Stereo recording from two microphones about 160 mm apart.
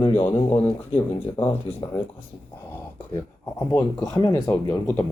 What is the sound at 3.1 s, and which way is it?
Speech, 20° left (ahead or behind).